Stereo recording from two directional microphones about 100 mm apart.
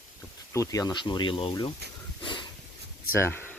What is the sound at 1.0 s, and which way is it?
Speech, 50° left (ahead or behind).